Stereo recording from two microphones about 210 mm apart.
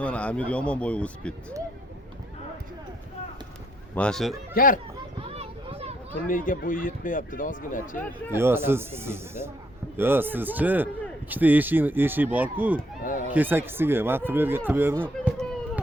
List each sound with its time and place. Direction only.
0.0 s speech: 5° left (ahead or behind)
3.9 s speech: 5° left (ahead or behind)
4.5 s speech: 40° left (ahead or behind)
5.2 s a sound: 30° right (ahead or behind)
6.2 s speech: 40° left (ahead or behind)
8.3 s speech: 10° right (ahead or behind)
13.0 s speech: 40° left (ahead or behind)
13.3 s speech: 10° right (ahead or behind)